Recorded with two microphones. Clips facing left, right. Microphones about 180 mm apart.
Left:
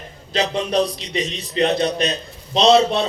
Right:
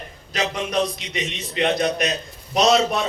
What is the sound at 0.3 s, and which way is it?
A man's voice, 30° left (ahead or behind).